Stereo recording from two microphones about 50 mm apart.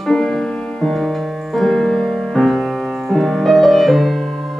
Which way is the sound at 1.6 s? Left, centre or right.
Centre.